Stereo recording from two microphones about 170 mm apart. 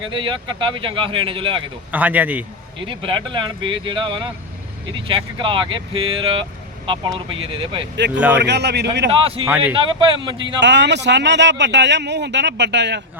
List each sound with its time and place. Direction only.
0.1 s speech: 30° right (ahead or behind)
1.9 s a man's voice: 10° right (ahead or behind)
2.8 s speech: 30° right (ahead or behind)
7.9 s a man's voice: 90° right
9.0 s speech: 35° right (ahead or behind)
9.5 s a man's voice: 10° right (ahead or behind)
9.7 s speech: 30° right (ahead or behind)
10.3 s a man's voice: 90° right